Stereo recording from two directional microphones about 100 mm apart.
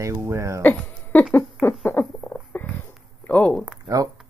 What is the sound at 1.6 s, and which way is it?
Rodents, 5° right (ahead or behind).